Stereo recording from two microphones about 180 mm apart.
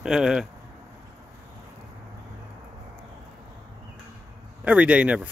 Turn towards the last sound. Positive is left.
turn(degrees=-5)  # may be behind; listen again after turning